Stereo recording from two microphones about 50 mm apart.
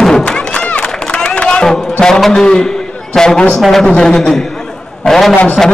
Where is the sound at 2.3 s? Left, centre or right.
Centre.